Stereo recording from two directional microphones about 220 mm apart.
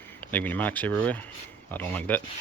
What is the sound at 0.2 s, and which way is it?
Speech, 5° left (ahead or behind).